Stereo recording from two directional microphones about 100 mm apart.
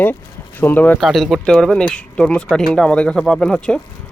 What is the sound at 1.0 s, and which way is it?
Speech, centre (ahead or behind).